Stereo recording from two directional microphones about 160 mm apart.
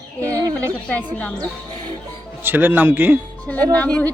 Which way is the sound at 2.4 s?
10° right (ahead or behind).